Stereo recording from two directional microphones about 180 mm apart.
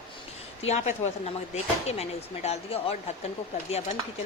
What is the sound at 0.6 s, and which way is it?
Speech, 40° left (ahead or behind).